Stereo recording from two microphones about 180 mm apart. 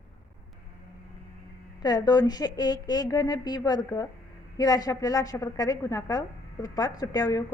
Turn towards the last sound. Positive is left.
turn(degrees=20)  # may be behind; listen again after turning